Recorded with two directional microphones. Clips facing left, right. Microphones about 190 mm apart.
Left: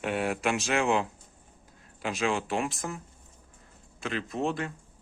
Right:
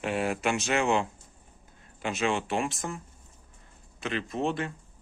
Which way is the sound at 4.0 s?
Centre (ahead or behind).